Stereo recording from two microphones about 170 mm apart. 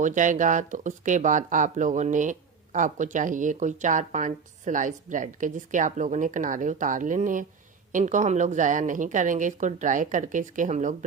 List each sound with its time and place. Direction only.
0.0 s speech: 50° right (ahead or behind)